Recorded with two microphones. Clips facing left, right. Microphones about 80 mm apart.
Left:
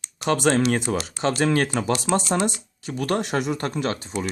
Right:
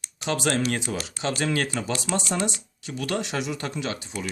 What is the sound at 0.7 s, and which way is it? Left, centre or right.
Speech, left.